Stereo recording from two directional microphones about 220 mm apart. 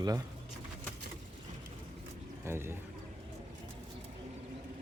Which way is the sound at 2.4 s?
10° right (ahead or behind).